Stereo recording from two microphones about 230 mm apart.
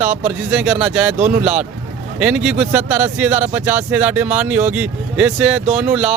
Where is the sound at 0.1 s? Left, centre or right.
Right.